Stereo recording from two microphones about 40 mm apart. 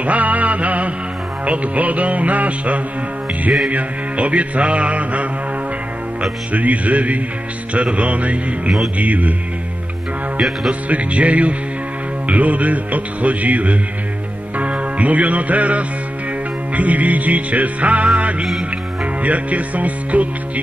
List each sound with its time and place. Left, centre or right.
0.0 s music: right
6.5 s music: right
10.7 s music: right